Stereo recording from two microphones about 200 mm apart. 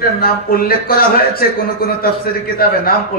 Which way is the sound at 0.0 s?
45° left (ahead or behind).